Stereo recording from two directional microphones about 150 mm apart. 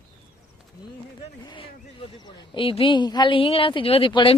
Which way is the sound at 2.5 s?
35° left (ahead or behind).